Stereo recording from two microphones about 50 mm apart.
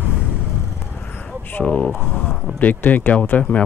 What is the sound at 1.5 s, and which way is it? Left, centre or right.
Speech, left.